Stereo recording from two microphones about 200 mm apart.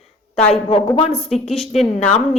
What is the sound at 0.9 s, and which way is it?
Speech, 30° left (ahead or behind).